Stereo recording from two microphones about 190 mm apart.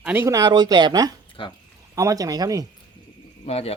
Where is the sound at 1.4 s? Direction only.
25° left (ahead or behind).